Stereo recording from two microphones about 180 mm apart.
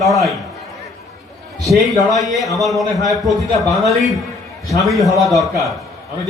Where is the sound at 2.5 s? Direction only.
Centre (ahead or behind).